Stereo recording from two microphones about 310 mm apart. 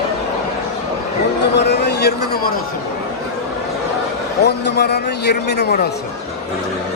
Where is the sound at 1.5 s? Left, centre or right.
Left.